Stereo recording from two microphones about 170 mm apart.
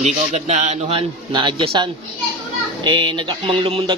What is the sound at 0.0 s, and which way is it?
A man's voice, 45° right (ahead or behind).